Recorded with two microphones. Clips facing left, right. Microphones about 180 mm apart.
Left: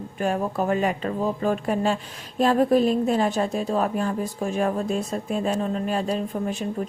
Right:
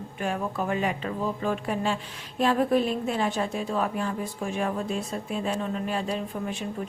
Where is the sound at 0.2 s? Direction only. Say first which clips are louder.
Left 5 dB; 40° left (ahead or behind).